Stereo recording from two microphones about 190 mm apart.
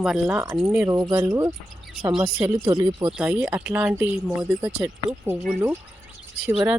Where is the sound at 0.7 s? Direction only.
15° right (ahead or behind).